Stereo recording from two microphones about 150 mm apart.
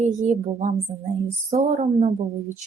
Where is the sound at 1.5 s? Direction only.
45° right (ahead or behind).